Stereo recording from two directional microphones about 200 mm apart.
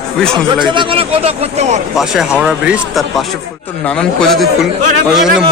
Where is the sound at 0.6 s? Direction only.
25° right (ahead or behind).